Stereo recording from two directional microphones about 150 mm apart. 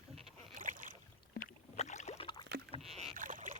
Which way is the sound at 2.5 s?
90° right.